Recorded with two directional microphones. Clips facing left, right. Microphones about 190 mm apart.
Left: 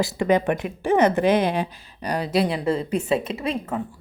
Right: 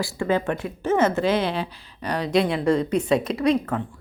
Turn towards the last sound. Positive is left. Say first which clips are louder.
# right 5 dB
turn(degrees=5)  # may be behind; listen again after turning